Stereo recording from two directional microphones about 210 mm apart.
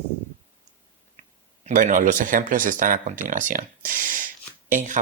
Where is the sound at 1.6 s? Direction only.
35° right (ahead or behind).